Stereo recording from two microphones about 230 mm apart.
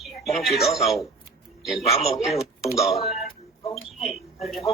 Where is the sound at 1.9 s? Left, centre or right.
Left.